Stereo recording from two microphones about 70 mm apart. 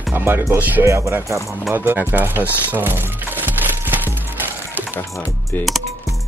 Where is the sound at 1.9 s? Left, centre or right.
Right.